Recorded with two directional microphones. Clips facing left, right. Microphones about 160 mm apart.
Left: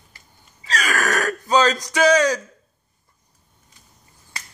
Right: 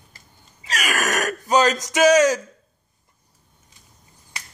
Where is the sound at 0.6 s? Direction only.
15° right (ahead or behind).